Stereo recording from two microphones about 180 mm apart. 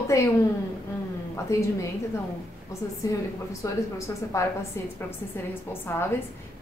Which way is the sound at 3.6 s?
15° left (ahead or behind).